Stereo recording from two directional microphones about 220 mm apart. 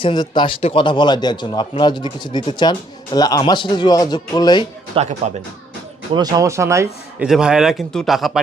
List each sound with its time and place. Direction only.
0.0 s speech: 20° left (ahead or behind)
4.9 s speech: 25° right (ahead or behind)
6.1 s speech: 15° right (ahead or behind); by 8.4 s centre (ahead or behind)